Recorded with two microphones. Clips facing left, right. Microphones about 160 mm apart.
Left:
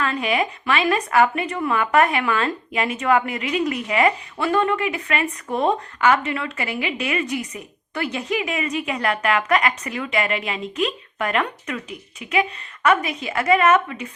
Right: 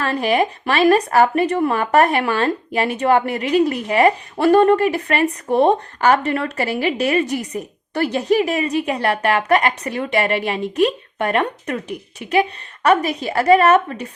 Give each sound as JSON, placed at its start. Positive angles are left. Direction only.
{"t": 0.0, "sound": "speech", "side_deg": -35}